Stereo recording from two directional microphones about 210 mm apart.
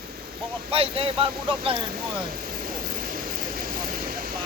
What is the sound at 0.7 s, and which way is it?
Speech, 25° right (ahead or behind).